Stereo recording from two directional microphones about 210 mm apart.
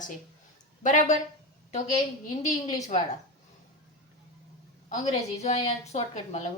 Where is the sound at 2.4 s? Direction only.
35° left (ahead or behind).